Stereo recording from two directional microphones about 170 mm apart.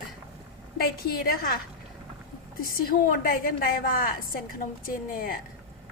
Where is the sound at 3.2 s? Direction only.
60° left (ahead or behind).